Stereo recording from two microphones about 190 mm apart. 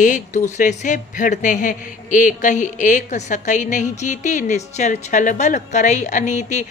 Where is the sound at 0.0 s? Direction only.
40° left (ahead or behind).